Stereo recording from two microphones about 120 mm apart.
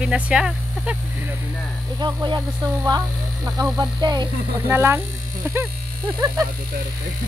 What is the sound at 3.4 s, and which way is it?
Speech, 25° right (ahead or behind).